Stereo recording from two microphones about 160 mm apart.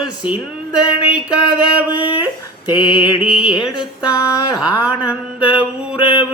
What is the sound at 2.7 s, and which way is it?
Mantra, 30° left (ahead or behind).